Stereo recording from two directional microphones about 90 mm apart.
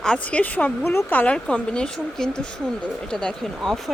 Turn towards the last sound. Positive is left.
turn(degrees=5)  # may be behind; listen again after turning